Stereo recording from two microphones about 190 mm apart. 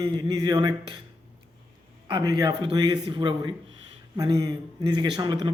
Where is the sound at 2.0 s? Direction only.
25° right (ahead or behind).